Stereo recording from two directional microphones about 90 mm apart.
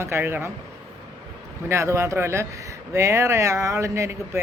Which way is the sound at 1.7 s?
30° right (ahead or behind).